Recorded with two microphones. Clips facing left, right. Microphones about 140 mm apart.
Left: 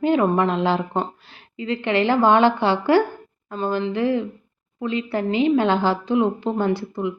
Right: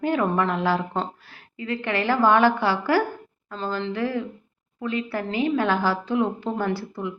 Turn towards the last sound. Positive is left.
turn(degrees=20)  # may be behind; listen again after turning